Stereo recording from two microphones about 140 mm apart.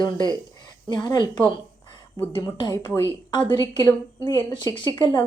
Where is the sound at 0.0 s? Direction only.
30° left (ahead or behind).